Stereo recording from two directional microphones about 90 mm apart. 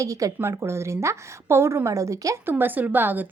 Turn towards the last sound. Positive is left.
turn(degrees=-20)  # may be behind; listen again after turning